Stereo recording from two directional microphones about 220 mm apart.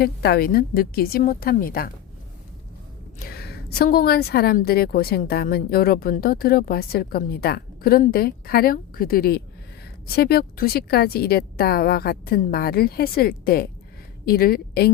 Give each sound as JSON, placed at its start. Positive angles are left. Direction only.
{"t": 0.0, "sound": "a woman's voice", "side_deg": 45}
{"t": 3.2, "sound": "a woman's voice", "side_deg": 45}